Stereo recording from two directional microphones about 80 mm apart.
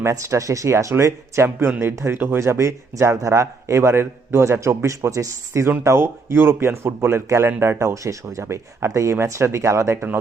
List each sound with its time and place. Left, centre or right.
0.0 s speech: right